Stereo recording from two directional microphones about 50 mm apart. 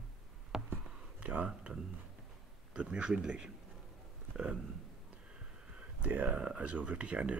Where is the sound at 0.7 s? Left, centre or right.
Right.